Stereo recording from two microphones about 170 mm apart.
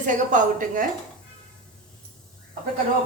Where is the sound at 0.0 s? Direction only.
50° right (ahead or behind).